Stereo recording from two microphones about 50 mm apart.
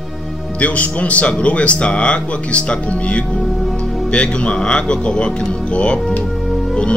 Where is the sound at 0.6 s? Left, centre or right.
Left.